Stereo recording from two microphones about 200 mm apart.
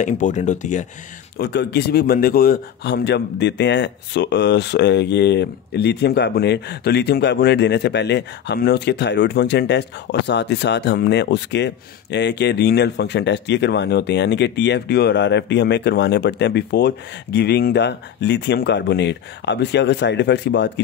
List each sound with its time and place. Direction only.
0.0 s speech: 40° left (ahead or behind)
1.4 s speech: 55° left (ahead or behind)